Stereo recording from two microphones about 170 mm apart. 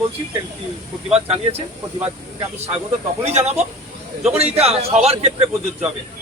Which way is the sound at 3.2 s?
40° right (ahead or behind).